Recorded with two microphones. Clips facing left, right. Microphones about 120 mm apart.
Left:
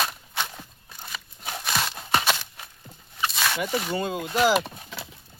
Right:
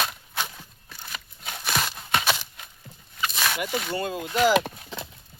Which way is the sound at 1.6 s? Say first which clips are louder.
Right 1 dB; centre (ahead or behind).